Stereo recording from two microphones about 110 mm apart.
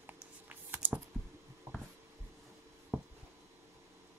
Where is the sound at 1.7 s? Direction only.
25° right (ahead or behind).